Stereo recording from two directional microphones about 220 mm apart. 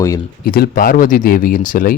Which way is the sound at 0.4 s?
45° left (ahead or behind).